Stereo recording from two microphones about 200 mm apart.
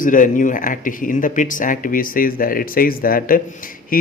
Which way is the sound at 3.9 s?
45° left (ahead or behind).